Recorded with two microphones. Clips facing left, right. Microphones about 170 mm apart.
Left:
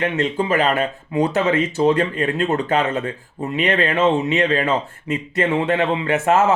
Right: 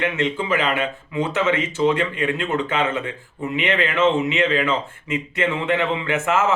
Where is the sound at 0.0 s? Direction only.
40° left (ahead or behind).